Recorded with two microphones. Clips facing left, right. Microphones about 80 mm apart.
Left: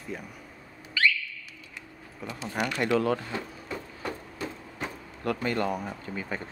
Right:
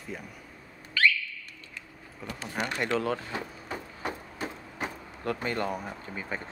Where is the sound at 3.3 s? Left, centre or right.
Right.